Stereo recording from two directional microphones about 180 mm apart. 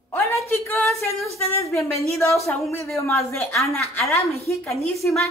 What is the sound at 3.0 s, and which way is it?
Speech, 15° left (ahead or behind).